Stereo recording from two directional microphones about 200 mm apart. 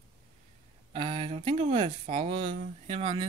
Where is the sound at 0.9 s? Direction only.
30° right (ahead or behind).